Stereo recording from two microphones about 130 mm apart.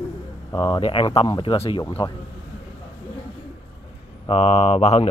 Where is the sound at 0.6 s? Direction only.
40° left (ahead or behind).